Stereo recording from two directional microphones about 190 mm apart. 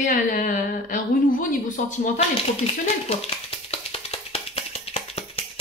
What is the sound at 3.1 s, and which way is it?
Tap, 30° left (ahead or behind).